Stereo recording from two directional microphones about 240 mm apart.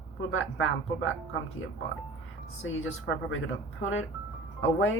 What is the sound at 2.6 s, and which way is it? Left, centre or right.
Speech, left.